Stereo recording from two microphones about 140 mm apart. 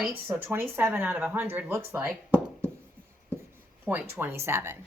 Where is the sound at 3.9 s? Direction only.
15° right (ahead or behind).